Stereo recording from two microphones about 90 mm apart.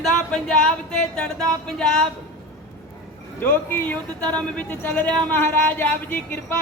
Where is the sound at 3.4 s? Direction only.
20° left (ahead or behind).